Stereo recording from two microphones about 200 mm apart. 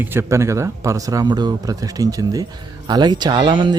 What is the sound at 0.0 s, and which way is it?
Speech, 10° right (ahead or behind).